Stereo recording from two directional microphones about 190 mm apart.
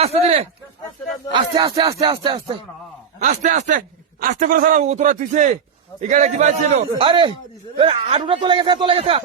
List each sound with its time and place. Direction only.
0.0 s a sound: 35° right (ahead or behind)
1.3 s a man's voice: 20° right (ahead or behind)
3.2 s a man's voice: 40° right (ahead or behind)